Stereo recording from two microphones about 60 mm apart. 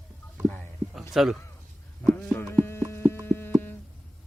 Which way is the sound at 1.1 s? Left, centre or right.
Centre.